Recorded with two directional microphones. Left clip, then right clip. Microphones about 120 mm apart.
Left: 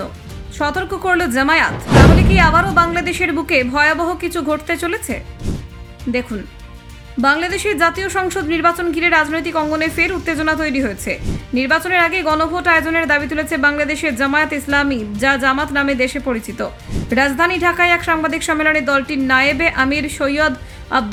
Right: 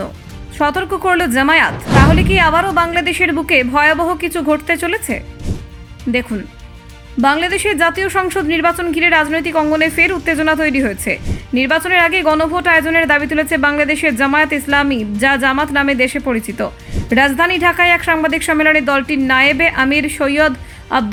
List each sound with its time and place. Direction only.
0.6 s a woman's voice: 40° right (ahead or behind)
5.5 s music: centre (ahead or behind)
6.1 s a woman's voice: 40° right (ahead or behind)